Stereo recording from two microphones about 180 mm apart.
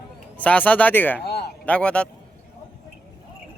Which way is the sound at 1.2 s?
60° left (ahead or behind).